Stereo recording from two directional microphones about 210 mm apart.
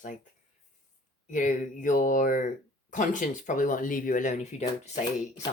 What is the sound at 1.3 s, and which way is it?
Speech, 35° left (ahead or behind).